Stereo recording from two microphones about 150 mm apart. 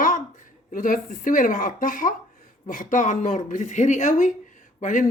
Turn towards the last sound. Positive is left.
turn(degrees=55)  # may be behind; listen again after turning